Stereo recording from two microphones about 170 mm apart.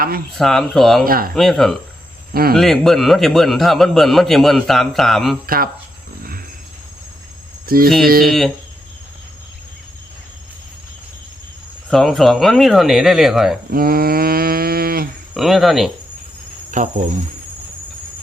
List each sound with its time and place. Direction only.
0.3 s a man's voice: centre (ahead or behind)
1.0 s speech: 60° right (ahead or behind)
1.4 s a man's voice: centre (ahead or behind)
2.3 s speech: 60° right (ahead or behind)
2.6 s a man's voice: centre (ahead or behind)
7.7 s speech: 60° right (ahead or behind)
8.3 s a man's voice: centre (ahead or behind)
11.9 s a man's voice: centre (ahead or behind)
13.7 s a sound: 60° right (ahead or behind)
15.4 s a man's voice: centre (ahead or behind)
16.7 s speech: 50° right (ahead or behind)